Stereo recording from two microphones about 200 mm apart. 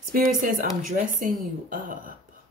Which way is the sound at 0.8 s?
40° right (ahead or behind).